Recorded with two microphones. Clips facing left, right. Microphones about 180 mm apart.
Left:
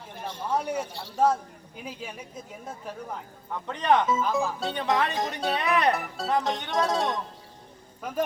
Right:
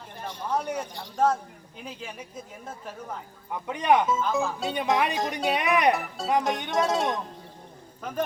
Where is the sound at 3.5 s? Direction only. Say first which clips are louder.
Right 1 dB; 10° right (ahead or behind).